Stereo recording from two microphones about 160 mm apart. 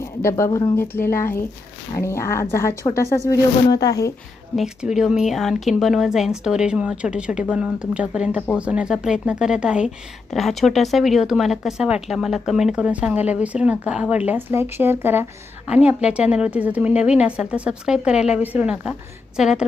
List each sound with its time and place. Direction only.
0.0 s speech: 15° left (ahead or behind)
4.5 s speech: 5° right (ahead or behind)